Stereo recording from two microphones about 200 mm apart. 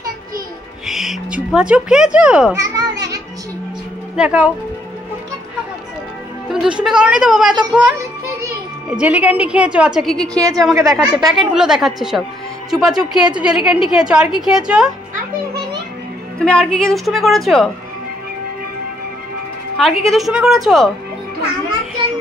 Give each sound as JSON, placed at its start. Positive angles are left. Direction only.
{"t": 0.8, "sound": "music", "side_deg": 0}
{"t": 2.1, "sound": "a woman's voice", "side_deg": -5}
{"t": 2.6, "sound": "children playing", "side_deg": -15}
{"t": 4.2, "sound": "a woman's voice", "side_deg": -5}
{"t": 6.5, "sound": "a woman's voice", "side_deg": -5}
{"t": 8.9, "sound": "a woman's voice", "side_deg": -5}
{"t": 10.4, "sound": "a woman's voice", "side_deg": -20}
{"t": 11.3, "sound": "a woman's voice", "side_deg": -5}
{"t": 16.3, "sound": "a woman's voice", "side_deg": 5}
{"t": 19.8, "sound": "a woman's voice", "side_deg": 0}